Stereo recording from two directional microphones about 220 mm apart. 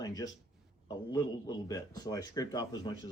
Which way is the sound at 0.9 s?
15° left (ahead or behind).